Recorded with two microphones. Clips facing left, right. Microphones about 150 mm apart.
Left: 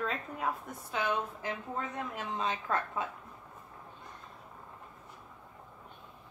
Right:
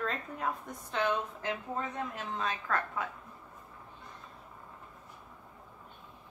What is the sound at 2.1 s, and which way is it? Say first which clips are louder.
Speech: left 1 dB; 20° left (ahead or behind).